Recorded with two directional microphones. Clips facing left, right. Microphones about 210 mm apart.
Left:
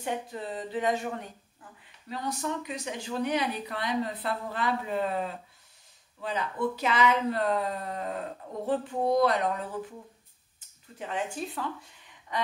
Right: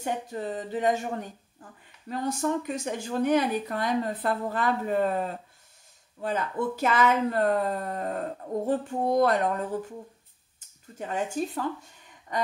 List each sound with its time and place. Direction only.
0.0 s speech: 45° right (ahead or behind)
2.0 s speech: 50° right (ahead or behind)
11.0 s speech: 40° right (ahead or behind)